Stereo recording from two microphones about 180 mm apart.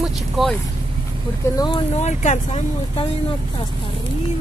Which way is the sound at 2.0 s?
40° left (ahead or behind).